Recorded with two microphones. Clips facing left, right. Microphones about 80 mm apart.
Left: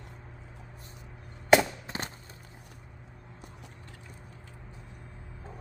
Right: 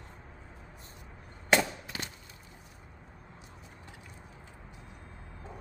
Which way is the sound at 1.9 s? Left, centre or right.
Left.